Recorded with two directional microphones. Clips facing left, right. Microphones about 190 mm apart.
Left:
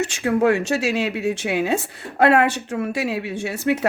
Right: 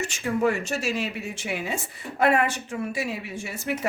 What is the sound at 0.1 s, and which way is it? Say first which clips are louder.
Speech: left 4 dB; 75° left (ahead or behind).